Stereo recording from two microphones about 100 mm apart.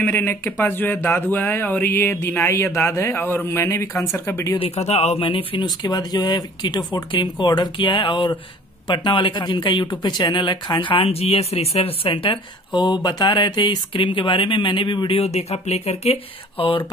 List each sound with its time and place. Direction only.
0.0 s speech: 20° left (ahead or behind)
4.6 s speech: 85° left; by 12.4 s 65° left (ahead or behind)
12.7 s speech: 45° left (ahead or behind)
15.1 s speech: 90° left; by 16.8 s 65° left (ahead or behind)